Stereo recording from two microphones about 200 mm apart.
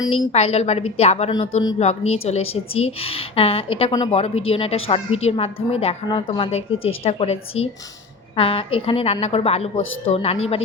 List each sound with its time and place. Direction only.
0.3 s a woman's voice: 30° left (ahead or behind)